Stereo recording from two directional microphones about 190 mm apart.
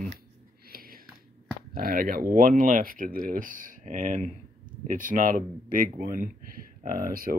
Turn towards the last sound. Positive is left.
turn(degrees=-50)  # may be behind; listen again after turning